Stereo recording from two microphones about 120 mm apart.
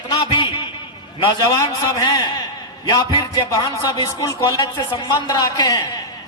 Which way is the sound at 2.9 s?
35° left (ahead or behind).